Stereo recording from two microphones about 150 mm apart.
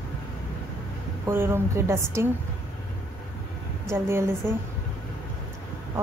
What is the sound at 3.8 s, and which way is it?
Speech, 15° right (ahead or behind).